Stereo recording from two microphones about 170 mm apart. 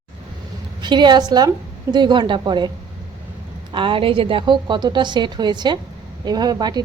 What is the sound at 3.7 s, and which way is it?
Speech, 30° right (ahead or behind).